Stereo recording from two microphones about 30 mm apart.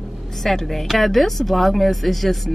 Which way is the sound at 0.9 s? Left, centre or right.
Centre.